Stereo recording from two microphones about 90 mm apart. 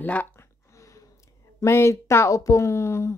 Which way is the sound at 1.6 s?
30° left (ahead or behind).